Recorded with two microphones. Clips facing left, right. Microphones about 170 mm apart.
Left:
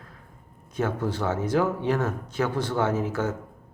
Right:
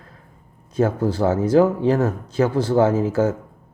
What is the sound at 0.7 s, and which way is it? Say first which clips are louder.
Speech: right 7 dB; 35° right (ahead or behind).